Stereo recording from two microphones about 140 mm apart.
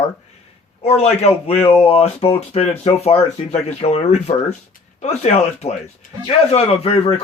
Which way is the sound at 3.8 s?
50° left (ahead or behind).